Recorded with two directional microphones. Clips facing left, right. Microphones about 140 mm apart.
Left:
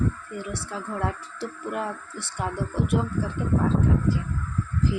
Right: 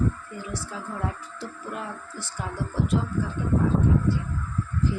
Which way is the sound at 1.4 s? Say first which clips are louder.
Left 6 dB; 65° left (ahead or behind).